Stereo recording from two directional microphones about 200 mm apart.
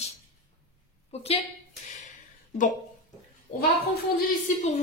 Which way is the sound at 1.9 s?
40° left (ahead or behind).